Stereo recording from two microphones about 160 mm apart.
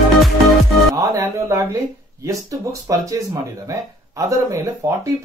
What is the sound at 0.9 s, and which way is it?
Speech, 20° right (ahead or behind).